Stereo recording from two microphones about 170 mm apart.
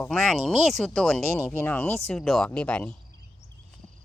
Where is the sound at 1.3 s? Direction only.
15° right (ahead or behind).